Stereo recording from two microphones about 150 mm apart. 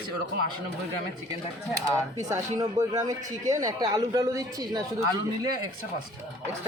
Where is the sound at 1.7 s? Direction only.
25° right (ahead or behind).